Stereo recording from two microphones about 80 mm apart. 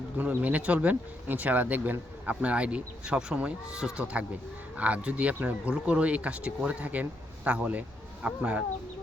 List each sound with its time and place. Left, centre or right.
0.2 s speech: centre